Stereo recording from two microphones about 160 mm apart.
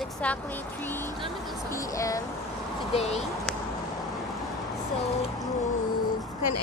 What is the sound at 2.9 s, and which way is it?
Speech, 40° left (ahead or behind).